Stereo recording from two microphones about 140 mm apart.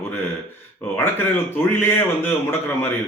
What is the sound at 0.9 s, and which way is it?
A man's voice, 15° left (ahead or behind).